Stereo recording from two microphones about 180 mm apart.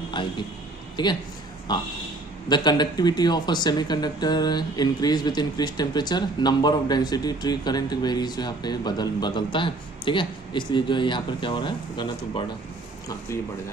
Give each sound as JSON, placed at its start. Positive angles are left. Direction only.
{"t": 0.2, "sound": "speech", "side_deg": 25}